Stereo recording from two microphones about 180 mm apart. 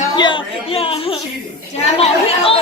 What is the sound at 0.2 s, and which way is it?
A man's voice, 25° left (ahead or behind).